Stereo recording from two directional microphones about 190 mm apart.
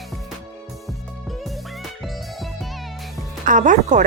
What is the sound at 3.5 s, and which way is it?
Speech, 45° right (ahead or behind).